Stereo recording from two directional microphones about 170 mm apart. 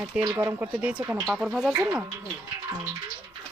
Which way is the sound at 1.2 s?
Centre (ahead or behind).